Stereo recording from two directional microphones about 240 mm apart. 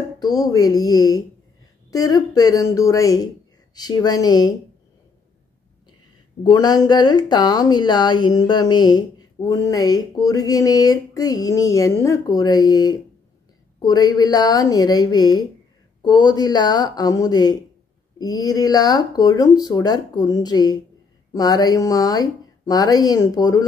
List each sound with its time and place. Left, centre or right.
0.3 s speech: centre
6.4 s speech: centre